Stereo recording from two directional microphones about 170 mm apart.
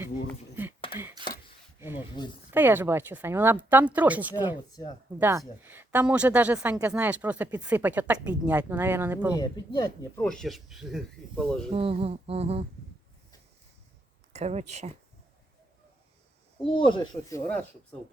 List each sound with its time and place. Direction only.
0.6 s a sound: 10° right (ahead or behind)
1.8 s speech: 10° right (ahead or behind)
4.7 s speech: 25° left (ahead or behind)
5.6 s speech: 10° right (ahead or behind)
10.2 s speech: 5° left (ahead or behind)
11.7 s a sound: 35° right (ahead or behind)
14.3 s a sound: 40° right (ahead or behind)
16.6 s speech: 30° left (ahead or behind)
17.3 s speech: 10° left (ahead or behind)